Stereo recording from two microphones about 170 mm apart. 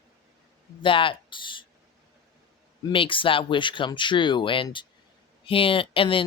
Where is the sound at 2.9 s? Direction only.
30° left (ahead or behind).